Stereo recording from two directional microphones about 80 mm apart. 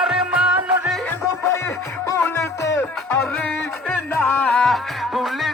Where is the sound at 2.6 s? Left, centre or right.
Left.